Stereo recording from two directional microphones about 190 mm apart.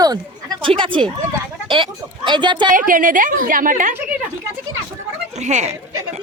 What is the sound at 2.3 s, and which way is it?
Speech, 25° right (ahead or behind).